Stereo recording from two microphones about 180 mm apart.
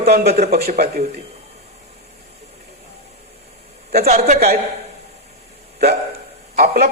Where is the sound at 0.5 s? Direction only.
60° right (ahead or behind).